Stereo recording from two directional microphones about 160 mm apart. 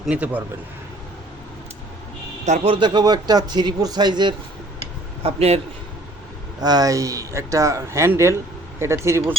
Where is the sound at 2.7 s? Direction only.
30° right (ahead or behind).